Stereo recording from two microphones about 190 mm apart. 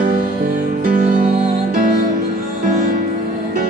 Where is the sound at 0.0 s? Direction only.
40° right (ahead or behind).